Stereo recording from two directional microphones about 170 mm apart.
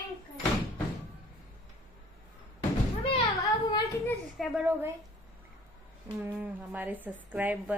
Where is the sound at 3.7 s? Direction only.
20° left (ahead or behind).